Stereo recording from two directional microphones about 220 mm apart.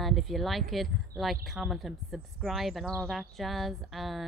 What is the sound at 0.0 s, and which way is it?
Speech, centre (ahead or behind).